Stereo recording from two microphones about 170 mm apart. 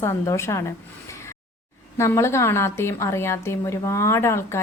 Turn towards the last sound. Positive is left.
turn(degrees=15)  # may be behind; listen again after turning